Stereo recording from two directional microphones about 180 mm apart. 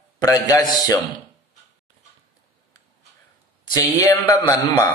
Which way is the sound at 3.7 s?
20° left (ahead or behind).